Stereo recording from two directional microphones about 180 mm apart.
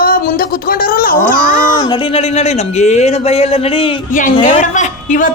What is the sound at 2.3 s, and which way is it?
A man's voice, 35° left (ahead or behind).